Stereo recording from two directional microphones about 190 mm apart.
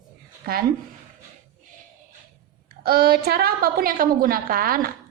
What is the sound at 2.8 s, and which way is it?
A woman's voice, 55° right (ahead or behind).